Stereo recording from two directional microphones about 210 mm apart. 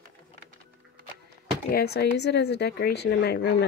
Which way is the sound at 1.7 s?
50° left (ahead or behind).